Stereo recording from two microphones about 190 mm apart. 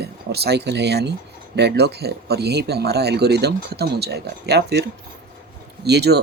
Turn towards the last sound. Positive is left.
turn(degrees=-60)  # may be behind; listen again after turning